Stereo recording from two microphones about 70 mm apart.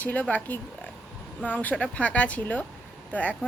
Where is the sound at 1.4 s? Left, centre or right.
Left.